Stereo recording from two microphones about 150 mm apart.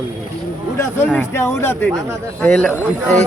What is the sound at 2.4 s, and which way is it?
Speech, 5° left (ahead or behind).